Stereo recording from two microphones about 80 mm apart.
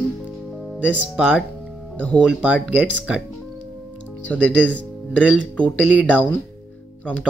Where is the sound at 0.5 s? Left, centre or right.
Centre.